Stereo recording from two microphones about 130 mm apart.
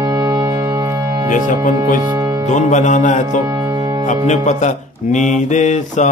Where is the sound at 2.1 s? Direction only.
25° right (ahead or behind).